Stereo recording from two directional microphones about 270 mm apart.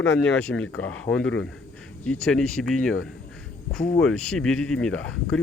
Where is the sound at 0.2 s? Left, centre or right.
Centre.